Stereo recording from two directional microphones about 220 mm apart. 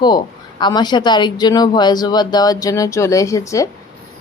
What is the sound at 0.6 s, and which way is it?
Speech, 20° left (ahead or behind).